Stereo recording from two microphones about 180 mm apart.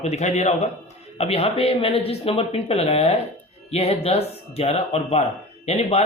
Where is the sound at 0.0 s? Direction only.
40° left (ahead or behind).